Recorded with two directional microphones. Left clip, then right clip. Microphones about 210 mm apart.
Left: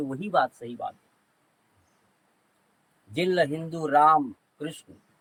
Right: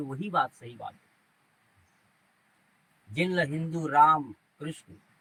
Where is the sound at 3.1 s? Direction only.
15° left (ahead or behind).